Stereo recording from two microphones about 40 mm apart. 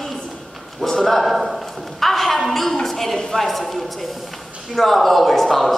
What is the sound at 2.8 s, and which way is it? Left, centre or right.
A woman's voice, centre.